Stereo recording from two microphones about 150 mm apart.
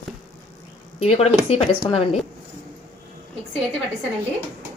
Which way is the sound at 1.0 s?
45° left (ahead or behind).